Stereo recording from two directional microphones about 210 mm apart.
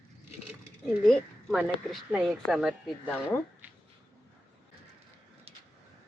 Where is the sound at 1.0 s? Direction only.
Centre (ahead or behind).